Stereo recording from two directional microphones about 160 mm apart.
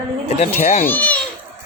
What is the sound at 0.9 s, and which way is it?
Speech, 10° left (ahead or behind).